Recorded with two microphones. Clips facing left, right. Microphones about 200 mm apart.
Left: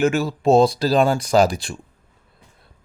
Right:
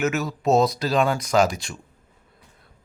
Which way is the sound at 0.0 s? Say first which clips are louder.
Left 5 dB; 30° left (ahead or behind).